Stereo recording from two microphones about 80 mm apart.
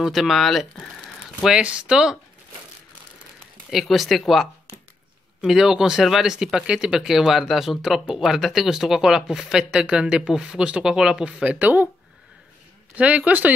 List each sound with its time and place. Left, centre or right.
0.0 s speech: centre
1.4 s speech: centre
3.7 s speech: centre
12.9 s speech: centre